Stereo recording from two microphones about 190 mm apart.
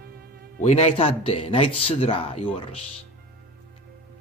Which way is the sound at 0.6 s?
35° left (ahead or behind).